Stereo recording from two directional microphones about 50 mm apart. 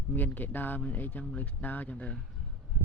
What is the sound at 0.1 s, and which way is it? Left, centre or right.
Speech, left.